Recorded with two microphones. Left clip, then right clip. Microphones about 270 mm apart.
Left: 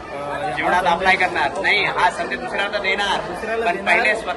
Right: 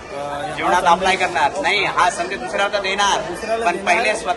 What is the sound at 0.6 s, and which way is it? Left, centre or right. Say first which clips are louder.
A man's voice: right 3 dB; centre.